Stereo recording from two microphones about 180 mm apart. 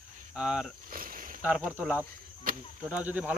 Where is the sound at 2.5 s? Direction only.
50° right (ahead or behind).